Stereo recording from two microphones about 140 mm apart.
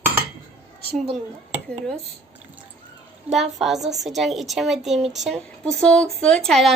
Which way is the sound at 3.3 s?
Centre (ahead or behind).